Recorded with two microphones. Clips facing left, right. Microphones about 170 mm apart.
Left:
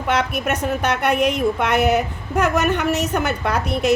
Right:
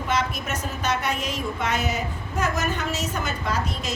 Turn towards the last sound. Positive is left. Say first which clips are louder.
# left 7 dB
turn(degrees=65)  # may be behind; listen again after turning